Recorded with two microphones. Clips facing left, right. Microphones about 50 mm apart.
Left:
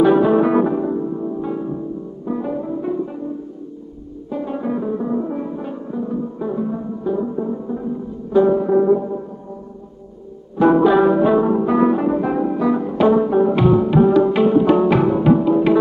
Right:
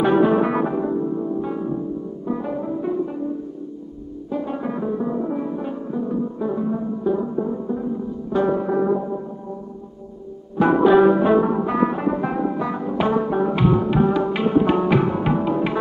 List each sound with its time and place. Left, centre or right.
0.1 s music: centre
4.3 s music: centre
8.4 s music: centre
8.6 s music: centre
10.6 s music: centre